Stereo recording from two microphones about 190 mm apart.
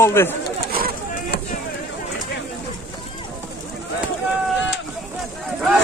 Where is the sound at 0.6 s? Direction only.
50° right (ahead or behind).